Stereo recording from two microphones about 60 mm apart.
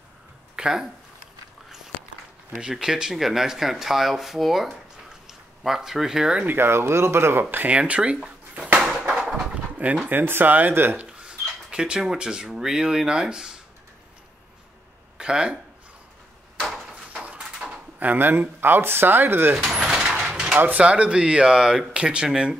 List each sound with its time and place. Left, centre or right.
0.6 s speech: centre
2.6 s speech: centre
6.4 s speech: right
7.5 s speech: right
8.7 s a sound: centre
10.0 s speech: right
11.1 s a sound: centre
11.7 s speech: centre
15.1 s speech: centre
16.9 s a sound: right
17.9 s speech: right
19.7 s a sound: centre
20.7 s speech: centre